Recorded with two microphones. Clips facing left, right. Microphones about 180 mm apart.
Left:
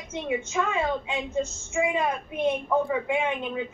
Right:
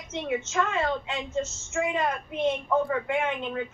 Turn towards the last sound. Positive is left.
turn(degrees=5)  # may be behind; listen again after turning